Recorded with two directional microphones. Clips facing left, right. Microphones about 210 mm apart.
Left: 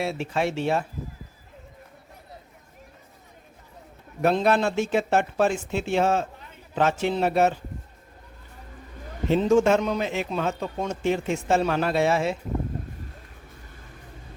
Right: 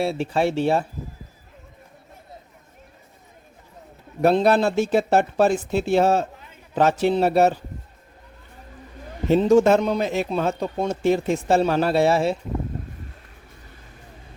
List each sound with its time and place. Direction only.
0.0 s a man's voice: 35° right (ahead or behind)
4.2 s a man's voice: 35° right (ahead or behind)
9.3 s a man's voice: 35° right (ahead or behind)